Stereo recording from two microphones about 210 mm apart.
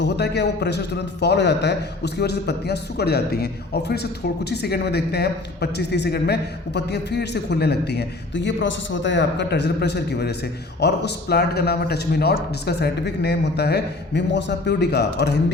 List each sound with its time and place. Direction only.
0.0 s a man's voice: 55° left (ahead or behind)